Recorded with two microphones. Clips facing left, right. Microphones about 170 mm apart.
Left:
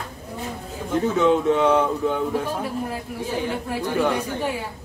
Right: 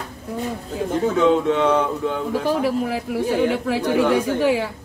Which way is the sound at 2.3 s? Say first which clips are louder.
Right 5 dB; 90° right.